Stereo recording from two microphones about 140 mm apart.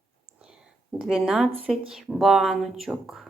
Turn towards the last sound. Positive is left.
turn(degrees=0)  # may be behind; listen again after turning